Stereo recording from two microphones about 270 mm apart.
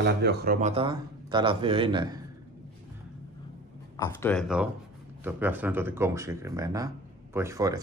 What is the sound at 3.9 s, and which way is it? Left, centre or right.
A man's voice, centre.